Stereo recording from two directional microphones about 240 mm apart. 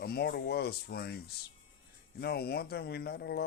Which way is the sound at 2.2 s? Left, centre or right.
Left.